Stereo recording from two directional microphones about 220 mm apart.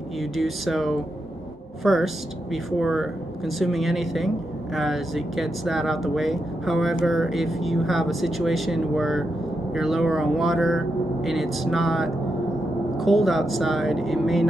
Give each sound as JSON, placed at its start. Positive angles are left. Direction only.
{"t": 0.2, "sound": "speech", "side_deg": 0}